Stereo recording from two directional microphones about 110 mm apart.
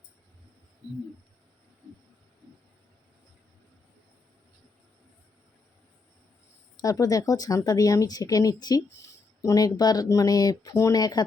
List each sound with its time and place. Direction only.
6.7 s speech: 35° left (ahead or behind)